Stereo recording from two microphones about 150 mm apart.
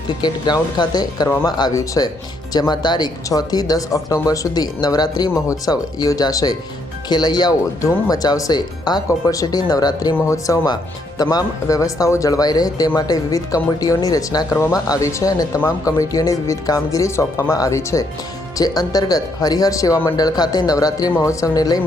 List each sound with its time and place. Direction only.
0.2 s speech: 30° left (ahead or behind)